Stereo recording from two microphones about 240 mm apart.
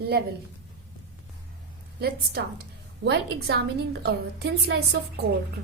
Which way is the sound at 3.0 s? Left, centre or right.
Right.